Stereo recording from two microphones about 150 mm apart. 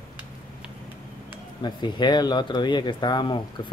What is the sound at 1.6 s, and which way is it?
Speech, 30° left (ahead or behind).